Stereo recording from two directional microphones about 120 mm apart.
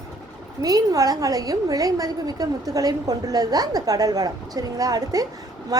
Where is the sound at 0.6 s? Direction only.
30° right (ahead or behind).